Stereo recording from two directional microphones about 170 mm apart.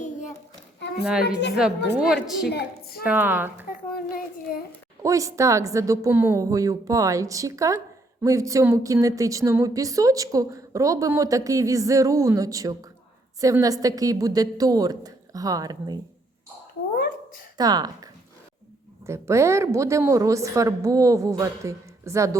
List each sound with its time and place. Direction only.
0.0 s child singing: 45° left (ahead or behind)
1.2 s a woman's voice: 85° left
2.2 s a woman's voice: centre (ahead or behind)
2.5 s a woman's voice: 70° left (ahead or behind)
3.0 s a woman's voice: 10° right (ahead or behind)
3.9 s a child's voice: 60° left (ahead or behind)
5.0 s speech: 20° right (ahead or behind)
17.6 s a woman's voice: 25° right (ahead or behind)